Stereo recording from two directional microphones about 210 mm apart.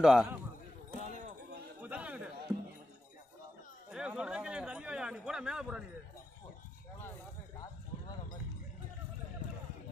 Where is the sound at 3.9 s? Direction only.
5° right (ahead or behind).